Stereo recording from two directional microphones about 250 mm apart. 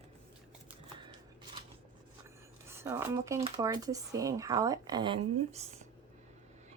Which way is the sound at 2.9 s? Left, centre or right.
Centre.